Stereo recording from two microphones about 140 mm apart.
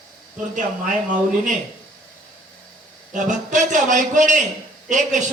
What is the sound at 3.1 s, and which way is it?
A man's voice, 65° right (ahead or behind).